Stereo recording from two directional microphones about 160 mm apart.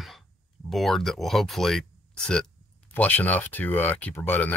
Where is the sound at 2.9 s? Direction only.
10° left (ahead or behind).